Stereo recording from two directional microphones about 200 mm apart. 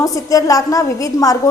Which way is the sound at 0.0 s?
15° left (ahead or behind).